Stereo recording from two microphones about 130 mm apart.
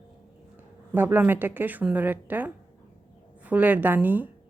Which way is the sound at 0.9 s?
15° right (ahead or behind).